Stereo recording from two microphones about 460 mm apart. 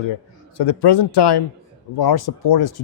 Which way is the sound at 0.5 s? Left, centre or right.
Left.